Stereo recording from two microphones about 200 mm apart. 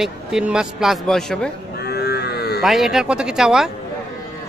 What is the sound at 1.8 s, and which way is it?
Livestock, 55° left (ahead or behind).